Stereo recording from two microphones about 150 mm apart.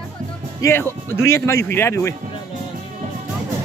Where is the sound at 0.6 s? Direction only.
15° left (ahead or behind).